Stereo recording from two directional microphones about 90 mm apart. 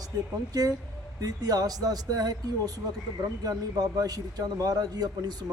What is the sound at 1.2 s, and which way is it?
A man's voice, 45° right (ahead or behind).